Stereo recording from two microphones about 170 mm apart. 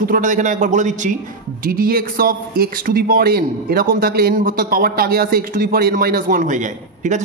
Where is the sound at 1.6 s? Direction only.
60° right (ahead or behind).